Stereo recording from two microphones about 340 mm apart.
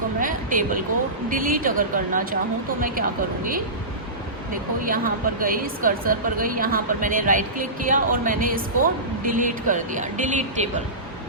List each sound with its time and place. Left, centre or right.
0.2 s a sound: right
1.3 s a woman's voice: right
4.8 s a woman's voice: right